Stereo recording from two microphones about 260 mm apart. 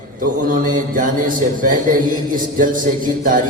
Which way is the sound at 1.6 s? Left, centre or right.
Right.